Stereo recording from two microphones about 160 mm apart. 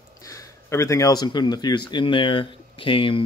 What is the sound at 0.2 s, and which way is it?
Speech, 20° left (ahead or behind).